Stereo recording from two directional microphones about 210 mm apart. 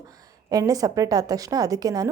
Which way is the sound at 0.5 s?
15° right (ahead or behind).